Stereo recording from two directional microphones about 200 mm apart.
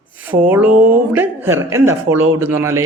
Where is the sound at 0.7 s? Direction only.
45° right (ahead or behind).